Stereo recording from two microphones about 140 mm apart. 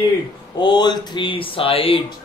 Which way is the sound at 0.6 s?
35° left (ahead or behind).